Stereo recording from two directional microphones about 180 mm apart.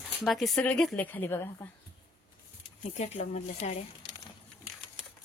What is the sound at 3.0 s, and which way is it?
Speech, 40° left (ahead or behind).